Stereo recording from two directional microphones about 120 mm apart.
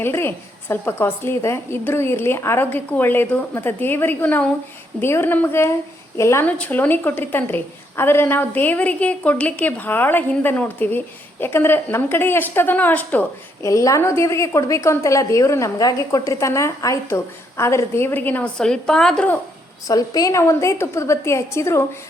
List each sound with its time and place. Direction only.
0.0 s a woman's voice: 20° left (ahead or behind)
13.7 s a woman's voice: 25° left (ahead or behind); by 19.4 s 10° left (ahead or behind)
19.9 s a woman's voice: 30° left (ahead or behind)